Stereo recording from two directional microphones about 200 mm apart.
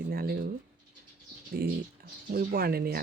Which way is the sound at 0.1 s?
50° right (ahead or behind).